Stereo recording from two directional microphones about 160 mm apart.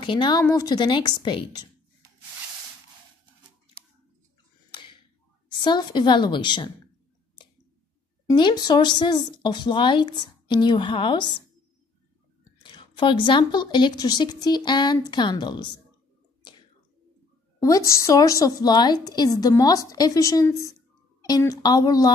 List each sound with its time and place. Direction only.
0.0 s a woman's voice: 30° left (ahead or behind)
4.6 s tick-tock: 30° left (ahead or behind)
5.6 s a woman's voice: 30° left (ahead or behind)
8.3 s a woman's voice: 25° left (ahead or behind)
12.6 s a woman's voice: 30° left (ahead or behind)
17.6 s a woman's voice: 20° left (ahead or behind)